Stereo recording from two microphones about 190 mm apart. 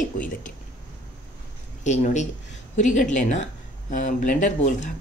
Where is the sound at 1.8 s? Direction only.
40° left (ahead or behind).